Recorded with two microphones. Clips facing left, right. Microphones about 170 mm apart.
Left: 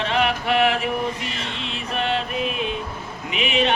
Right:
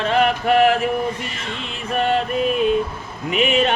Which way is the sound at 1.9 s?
45° right (ahead or behind).